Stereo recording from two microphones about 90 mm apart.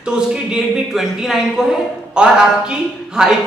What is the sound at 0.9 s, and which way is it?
Speech, 5° right (ahead or behind).